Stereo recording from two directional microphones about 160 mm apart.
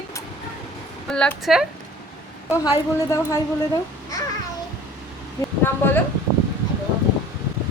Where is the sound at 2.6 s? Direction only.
20° left (ahead or behind).